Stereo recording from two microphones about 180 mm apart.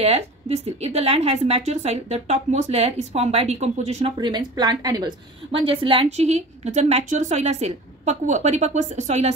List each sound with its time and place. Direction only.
0.0 s a woman's voice: 35° right (ahead or behind)
4.2 s a woman's voice: 25° right (ahead or behind)